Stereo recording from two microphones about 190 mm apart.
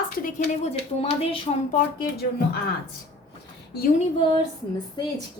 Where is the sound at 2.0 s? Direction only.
55° left (ahead or behind).